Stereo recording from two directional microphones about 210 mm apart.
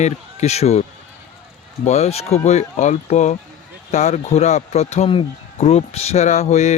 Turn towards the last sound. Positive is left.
turn(degrees=35)  # may be behind; listen again after turning